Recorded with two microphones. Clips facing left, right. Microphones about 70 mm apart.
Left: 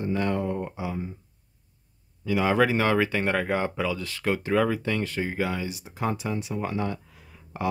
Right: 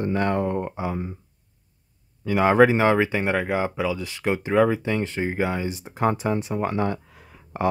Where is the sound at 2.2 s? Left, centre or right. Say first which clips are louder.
Right 4 dB; right.